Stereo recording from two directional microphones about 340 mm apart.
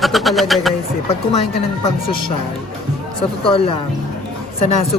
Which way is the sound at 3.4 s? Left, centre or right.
Centre.